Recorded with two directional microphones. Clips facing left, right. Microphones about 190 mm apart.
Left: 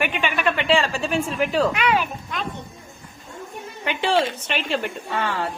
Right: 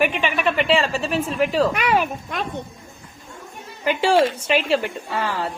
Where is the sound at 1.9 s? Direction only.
50° right (ahead or behind).